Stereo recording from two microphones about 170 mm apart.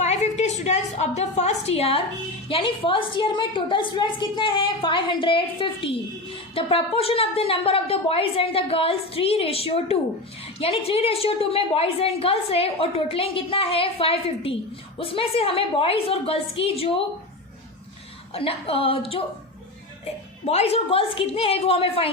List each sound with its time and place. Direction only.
0.0 s a woman's voice: 40° left (ahead or behind)
18.3 s a woman's voice: 35° left (ahead or behind)
20.4 s a woman's voice: 40° left (ahead or behind)